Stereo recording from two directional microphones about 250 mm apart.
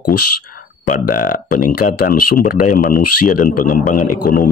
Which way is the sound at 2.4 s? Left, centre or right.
Left.